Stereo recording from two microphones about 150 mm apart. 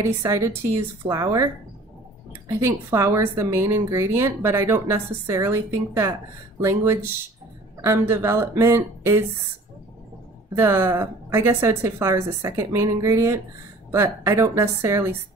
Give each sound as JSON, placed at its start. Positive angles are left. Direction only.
{"t": 0.0, "sound": "a woman's voice", "side_deg": -20}
{"t": 10.5, "sound": "a woman's voice", "side_deg": -15}